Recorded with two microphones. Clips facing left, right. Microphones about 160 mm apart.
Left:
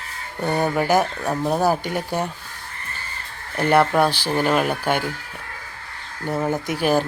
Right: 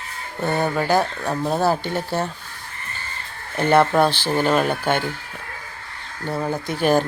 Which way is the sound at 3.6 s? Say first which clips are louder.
Right 1 dB; 5° left (ahead or behind).